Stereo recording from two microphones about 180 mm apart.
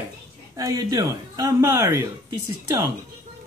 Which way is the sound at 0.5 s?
20° right (ahead or behind).